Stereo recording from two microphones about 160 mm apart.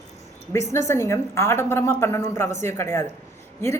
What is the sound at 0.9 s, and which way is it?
A woman's voice, 15° left (ahead or behind).